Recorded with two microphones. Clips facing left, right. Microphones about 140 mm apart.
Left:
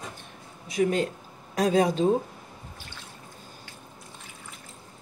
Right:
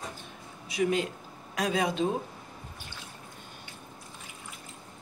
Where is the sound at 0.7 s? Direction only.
45° left (ahead or behind).